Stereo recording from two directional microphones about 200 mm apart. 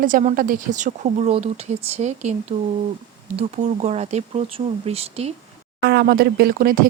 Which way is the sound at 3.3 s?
35° right (ahead or behind).